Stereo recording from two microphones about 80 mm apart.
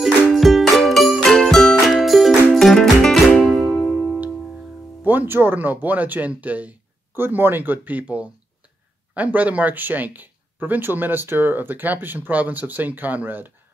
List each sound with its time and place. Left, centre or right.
0.0 s music: centre
5.0 s speech: right